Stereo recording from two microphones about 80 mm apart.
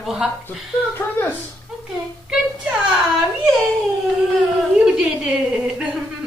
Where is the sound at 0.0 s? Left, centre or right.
Centre.